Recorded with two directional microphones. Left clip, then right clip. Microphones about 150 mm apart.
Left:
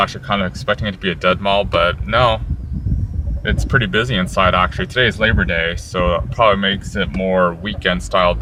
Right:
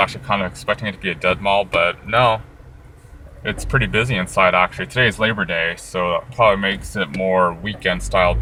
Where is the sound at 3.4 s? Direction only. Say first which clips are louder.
Left 3 dB; 30° left (ahead or behind).